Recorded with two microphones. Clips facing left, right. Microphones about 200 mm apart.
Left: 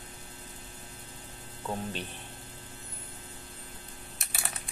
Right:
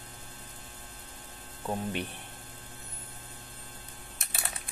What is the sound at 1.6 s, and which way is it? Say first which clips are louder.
Speech: right 2 dB; 15° right (ahead or behind).